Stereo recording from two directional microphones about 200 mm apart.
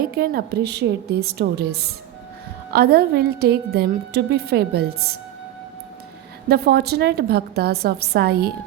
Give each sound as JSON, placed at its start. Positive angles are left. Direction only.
{"t": 0.1, "sound": "a woman's voice", "side_deg": -50}
{"t": 6.5, "sound": "a woman's voice", "side_deg": -55}